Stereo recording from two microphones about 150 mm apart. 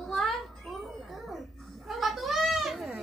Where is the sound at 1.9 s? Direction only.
Centre (ahead or behind).